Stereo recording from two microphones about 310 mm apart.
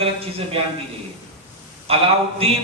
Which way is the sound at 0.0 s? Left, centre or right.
Centre.